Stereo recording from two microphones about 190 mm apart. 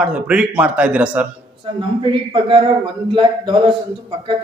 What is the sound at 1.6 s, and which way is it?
A man's voice, 25° right (ahead or behind).